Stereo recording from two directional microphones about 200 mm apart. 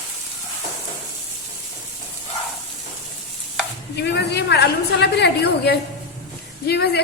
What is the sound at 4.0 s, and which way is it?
A woman's voice, 55° left (ahead or behind).